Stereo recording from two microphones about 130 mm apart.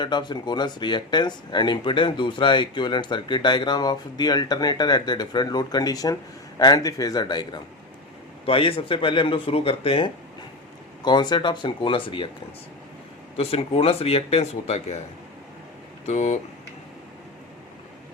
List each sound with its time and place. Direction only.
0.0 s speech: 35° left (ahead or behind)
8.4 s speech: 45° left (ahead or behind)
11.0 s speech: 35° left (ahead or behind)
13.3 s speech: 50° left (ahead or behind)
16.0 s speech: 60° left (ahead or behind)